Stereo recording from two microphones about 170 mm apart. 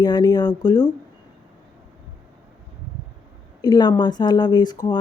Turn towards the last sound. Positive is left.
turn(degrees=25)  # may be behind; listen again after turning